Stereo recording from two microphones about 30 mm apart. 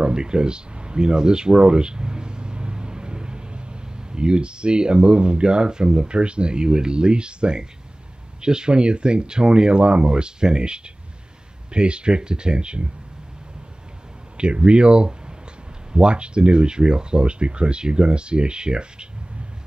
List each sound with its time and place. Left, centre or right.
0.0 s speech: right
14.3 s speech: right